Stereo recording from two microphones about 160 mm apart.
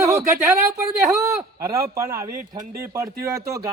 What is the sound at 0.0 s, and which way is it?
A man's voice, 20° right (ahead or behind).